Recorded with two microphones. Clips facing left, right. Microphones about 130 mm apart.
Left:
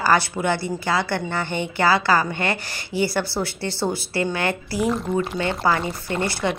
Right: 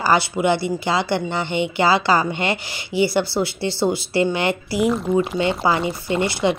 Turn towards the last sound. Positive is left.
turn(degrees=-15)  # may be behind; listen again after turning